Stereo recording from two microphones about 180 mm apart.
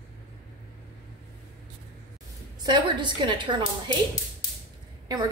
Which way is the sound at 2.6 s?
25° right (ahead or behind).